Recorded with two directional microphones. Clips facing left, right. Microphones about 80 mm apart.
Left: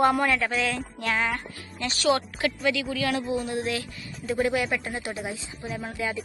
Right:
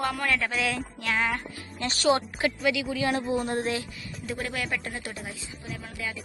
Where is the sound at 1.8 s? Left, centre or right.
Right.